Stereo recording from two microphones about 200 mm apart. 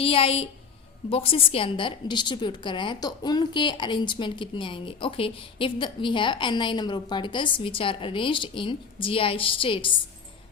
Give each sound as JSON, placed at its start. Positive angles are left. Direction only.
{"t": 0.0, "sound": "a woman's voice", "side_deg": 30}